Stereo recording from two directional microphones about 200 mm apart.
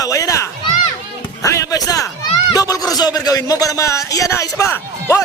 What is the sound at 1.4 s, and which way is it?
Speech, 20° left (ahead or behind).